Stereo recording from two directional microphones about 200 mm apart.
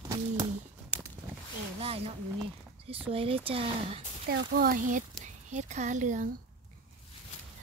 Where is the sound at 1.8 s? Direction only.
30° right (ahead or behind).